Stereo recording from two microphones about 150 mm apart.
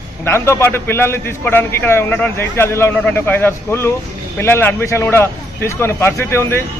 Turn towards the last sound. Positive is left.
turn(degrees=15)  # may be behind; listen again after turning